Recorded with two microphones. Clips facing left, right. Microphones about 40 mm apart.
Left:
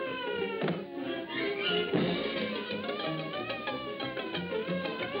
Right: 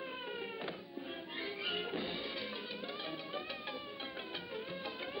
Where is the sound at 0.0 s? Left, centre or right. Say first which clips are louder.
Left 9 dB; left.